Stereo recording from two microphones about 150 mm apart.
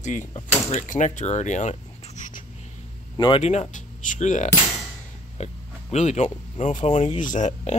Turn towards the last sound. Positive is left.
turn(degrees=50)  # may be behind; listen again after turning